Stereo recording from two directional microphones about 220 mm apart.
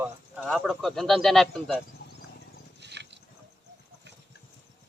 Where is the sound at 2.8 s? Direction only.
50° right (ahead or behind).